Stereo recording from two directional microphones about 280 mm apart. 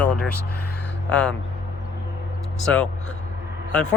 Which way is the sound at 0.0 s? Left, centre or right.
Centre.